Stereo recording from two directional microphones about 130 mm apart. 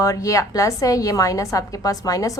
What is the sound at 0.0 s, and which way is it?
A woman's voice, 25° left (ahead or behind).